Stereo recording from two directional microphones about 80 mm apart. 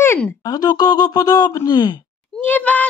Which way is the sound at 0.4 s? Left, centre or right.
Left.